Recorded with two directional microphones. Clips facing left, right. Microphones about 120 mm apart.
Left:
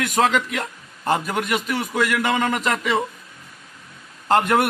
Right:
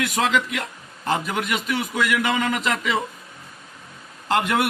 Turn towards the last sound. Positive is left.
turn(degrees=45)  # may be behind; listen again after turning